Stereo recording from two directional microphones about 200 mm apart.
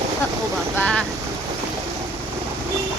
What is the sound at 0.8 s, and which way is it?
Boat, 5° left (ahead or behind).